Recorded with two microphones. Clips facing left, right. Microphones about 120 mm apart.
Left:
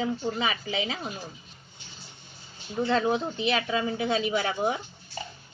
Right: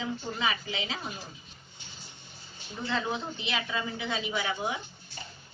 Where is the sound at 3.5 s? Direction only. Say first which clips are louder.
Left 7 dB; 55° left (ahead or behind).